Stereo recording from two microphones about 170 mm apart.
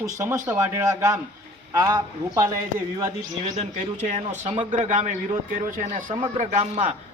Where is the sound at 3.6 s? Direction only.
40° right (ahead or behind).